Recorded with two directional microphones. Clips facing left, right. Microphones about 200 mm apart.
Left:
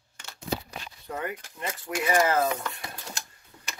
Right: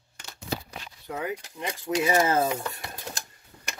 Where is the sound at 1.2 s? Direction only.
15° right (ahead or behind).